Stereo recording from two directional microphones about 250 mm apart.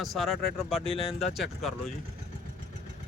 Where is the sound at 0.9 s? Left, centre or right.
Left.